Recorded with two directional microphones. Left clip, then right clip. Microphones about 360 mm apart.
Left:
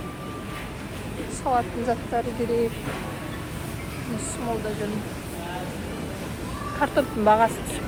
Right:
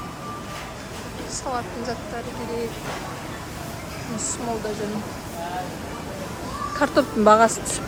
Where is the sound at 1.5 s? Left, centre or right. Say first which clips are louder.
Left 5 dB; centre.